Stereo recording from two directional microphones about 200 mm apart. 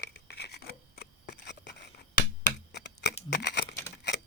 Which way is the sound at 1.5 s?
60° left (ahead or behind).